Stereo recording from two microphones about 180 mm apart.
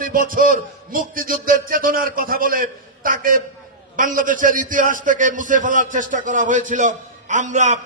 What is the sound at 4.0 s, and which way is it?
A man's voice, 45° right (ahead or behind).